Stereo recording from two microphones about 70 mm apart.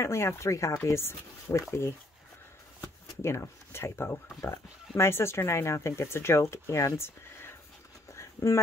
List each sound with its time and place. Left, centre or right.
0.0 s speech: left
3.2 s speech: left
8.1 s a sound: left